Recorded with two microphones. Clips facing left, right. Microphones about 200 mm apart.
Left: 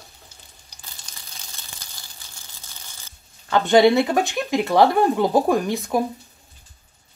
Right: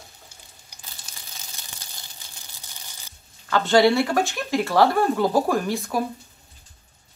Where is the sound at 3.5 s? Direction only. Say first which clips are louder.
Left 3 dB; 20° left (ahead or behind).